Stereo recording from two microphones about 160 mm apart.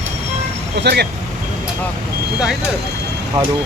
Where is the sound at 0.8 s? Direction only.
90° right.